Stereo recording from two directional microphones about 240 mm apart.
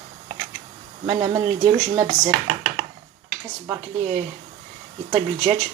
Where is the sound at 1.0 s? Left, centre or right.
Centre.